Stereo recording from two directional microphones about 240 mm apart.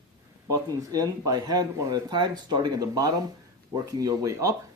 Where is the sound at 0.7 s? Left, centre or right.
Centre.